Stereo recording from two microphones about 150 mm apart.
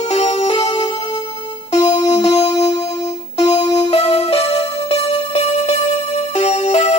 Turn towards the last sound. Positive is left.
turn(degrees=50)  # may be behind; listen again after turning